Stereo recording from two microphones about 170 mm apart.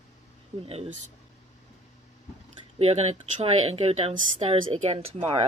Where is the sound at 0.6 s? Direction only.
35° right (ahead or behind).